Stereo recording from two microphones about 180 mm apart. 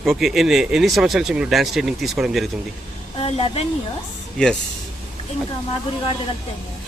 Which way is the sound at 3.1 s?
35° left (ahead or behind).